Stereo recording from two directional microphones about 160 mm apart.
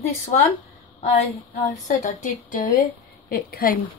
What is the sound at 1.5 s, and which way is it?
A woman's voice, 50° left (ahead or behind).